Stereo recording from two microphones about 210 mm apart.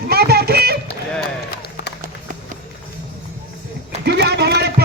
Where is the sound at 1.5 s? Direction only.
50° left (ahead or behind).